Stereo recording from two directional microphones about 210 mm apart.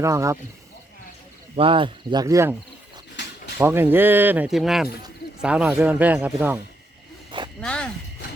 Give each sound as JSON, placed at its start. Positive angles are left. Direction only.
{"t": 0.0, "sound": "speech", "side_deg": -15}
{"t": 1.5, "sound": "speech", "side_deg": -25}
{"t": 3.2, "sound": "a sound", "side_deg": 60}
{"t": 3.6, "sound": "speech", "side_deg": -10}
{"t": 7.3, "sound": "a sound", "side_deg": -20}
{"t": 7.6, "sound": "speech", "side_deg": 5}